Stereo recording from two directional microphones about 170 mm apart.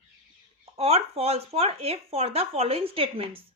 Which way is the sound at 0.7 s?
35° right (ahead or behind).